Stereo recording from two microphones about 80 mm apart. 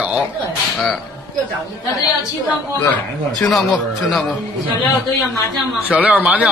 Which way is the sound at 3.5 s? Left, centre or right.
Centre.